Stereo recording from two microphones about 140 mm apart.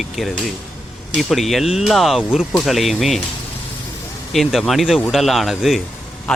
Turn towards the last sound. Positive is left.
turn(degrees=0)  # may be behind; listen again after turning